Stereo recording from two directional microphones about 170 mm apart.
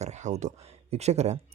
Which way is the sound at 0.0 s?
45° right (ahead or behind).